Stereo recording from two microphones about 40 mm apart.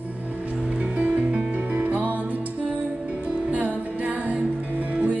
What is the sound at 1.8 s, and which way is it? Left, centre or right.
Music, right.